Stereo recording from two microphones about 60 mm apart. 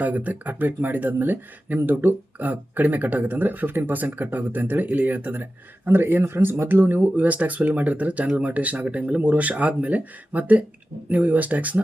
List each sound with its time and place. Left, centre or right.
0.0 s speech: right